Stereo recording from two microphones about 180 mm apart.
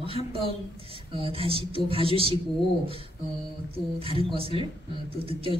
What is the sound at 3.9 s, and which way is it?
Speech, 30° right (ahead or behind).